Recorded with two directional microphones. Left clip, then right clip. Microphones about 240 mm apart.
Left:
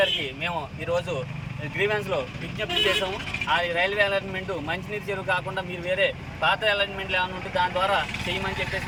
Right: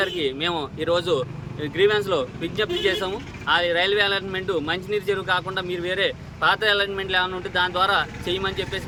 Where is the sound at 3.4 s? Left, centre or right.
Right.